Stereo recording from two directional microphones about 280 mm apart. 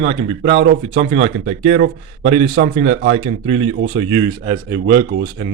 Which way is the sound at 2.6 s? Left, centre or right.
Right.